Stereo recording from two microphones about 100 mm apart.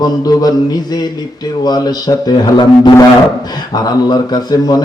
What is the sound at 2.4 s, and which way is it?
Speech, 45° left (ahead or behind).